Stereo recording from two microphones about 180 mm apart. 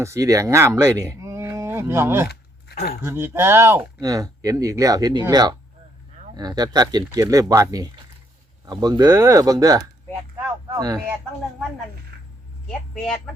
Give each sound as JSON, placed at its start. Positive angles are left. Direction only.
{"t": 0.0, "sound": "speech", "side_deg": -15}
{"t": 12.6, "sound": "a man's voice", "side_deg": 5}